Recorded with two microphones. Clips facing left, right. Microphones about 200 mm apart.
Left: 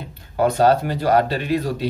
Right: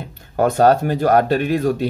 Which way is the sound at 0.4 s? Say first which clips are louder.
Right 2 dB; 50° right (ahead or behind).